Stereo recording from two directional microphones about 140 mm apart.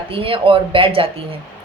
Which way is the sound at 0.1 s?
40° right (ahead or behind).